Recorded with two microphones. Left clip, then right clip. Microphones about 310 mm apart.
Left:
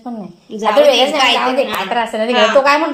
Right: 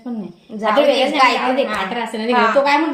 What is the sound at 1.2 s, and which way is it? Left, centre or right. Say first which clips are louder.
Speech: left 2 dB; centre.